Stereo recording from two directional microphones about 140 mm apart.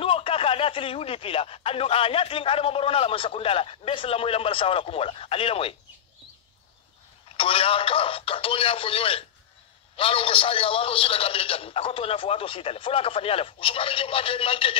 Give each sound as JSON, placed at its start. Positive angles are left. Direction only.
{"t": 0.0, "sound": "speech", "side_deg": 40}
{"t": 7.3, "sound": "speech", "side_deg": 40}